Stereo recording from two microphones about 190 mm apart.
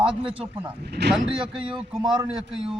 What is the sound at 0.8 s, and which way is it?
Speech, 60° right (ahead or behind).